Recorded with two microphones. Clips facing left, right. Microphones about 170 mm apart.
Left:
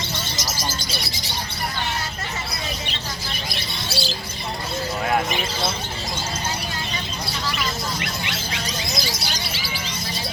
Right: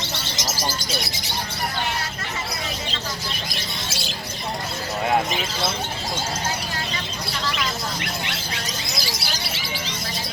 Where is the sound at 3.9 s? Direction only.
35° left (ahead or behind).